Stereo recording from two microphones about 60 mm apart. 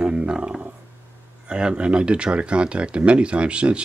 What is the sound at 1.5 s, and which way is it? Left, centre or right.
Speech, centre.